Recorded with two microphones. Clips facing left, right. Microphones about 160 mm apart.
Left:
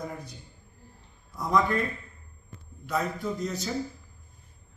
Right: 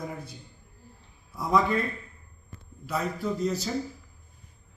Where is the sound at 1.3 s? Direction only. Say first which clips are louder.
Right 1 dB; 5° right (ahead or behind).